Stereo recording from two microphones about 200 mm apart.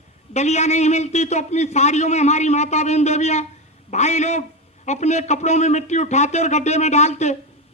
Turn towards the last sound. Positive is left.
turn(degrees=35)  # may be behind; listen again after turning